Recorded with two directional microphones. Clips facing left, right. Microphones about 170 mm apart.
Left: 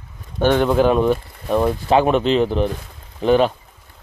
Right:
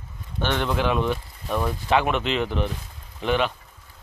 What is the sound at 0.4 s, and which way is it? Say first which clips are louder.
Speech: left 9 dB; 45° left (ahead or behind).